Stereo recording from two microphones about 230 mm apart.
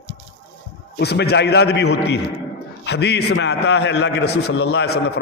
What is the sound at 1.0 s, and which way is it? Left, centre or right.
A man's voice, left.